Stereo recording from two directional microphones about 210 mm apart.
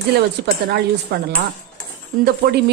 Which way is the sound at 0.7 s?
50° right (ahead or behind).